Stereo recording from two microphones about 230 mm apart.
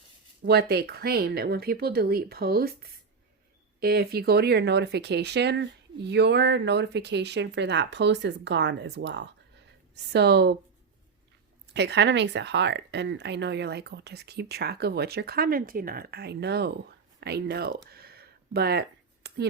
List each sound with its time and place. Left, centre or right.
0.4 s speech: right
11.7 s speech: right
17.9 s a sound: right